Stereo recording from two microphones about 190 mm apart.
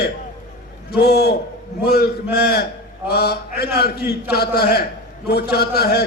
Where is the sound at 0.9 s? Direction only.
55° left (ahead or behind).